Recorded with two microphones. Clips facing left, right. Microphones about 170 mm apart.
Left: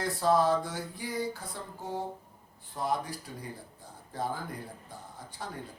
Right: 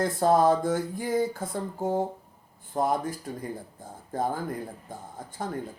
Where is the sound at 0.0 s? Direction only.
50° right (ahead or behind).